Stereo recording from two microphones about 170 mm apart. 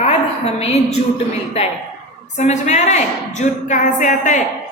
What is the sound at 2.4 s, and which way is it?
A woman's voice, 40° left (ahead or behind).